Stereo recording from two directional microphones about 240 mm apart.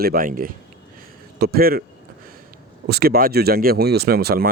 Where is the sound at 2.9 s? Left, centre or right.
Right.